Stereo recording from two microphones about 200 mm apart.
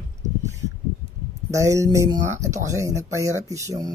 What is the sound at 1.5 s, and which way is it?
Speech, 15° right (ahead or behind).